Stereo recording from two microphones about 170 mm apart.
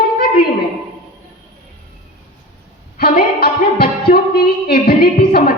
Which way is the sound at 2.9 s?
60° left (ahead or behind).